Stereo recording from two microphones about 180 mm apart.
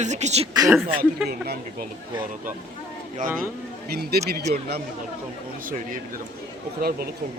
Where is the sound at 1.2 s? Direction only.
60° right (ahead or behind).